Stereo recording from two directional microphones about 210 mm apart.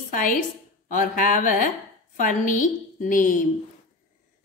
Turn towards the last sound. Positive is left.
turn(degrees=40)  # may be behind; listen again after turning